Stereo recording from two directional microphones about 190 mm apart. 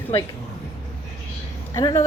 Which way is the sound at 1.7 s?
15° left (ahead or behind).